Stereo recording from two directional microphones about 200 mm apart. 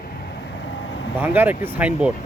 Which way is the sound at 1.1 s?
10° right (ahead or behind).